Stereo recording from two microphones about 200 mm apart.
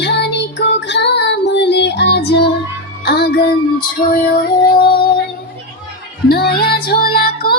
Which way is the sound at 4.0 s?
40° left (ahead or behind).